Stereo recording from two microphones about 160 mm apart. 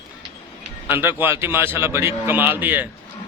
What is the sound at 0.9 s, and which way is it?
A man's voice, 15° right (ahead or behind).